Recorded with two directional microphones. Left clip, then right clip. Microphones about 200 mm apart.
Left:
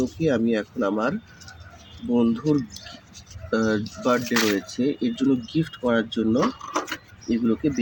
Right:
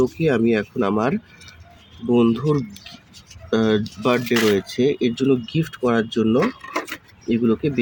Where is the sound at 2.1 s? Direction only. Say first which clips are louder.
Right 4 dB; 60° right (ahead or behind).